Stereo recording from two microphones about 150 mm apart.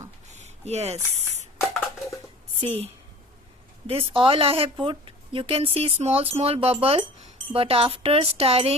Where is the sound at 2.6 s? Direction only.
45° right (ahead or behind).